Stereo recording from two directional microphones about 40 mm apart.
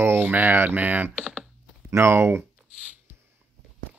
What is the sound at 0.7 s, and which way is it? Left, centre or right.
Speech, right.